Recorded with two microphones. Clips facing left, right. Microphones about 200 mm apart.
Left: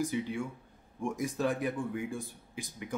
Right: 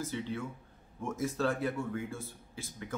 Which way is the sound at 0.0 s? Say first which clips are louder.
Left 4 dB; 15° left (ahead or behind).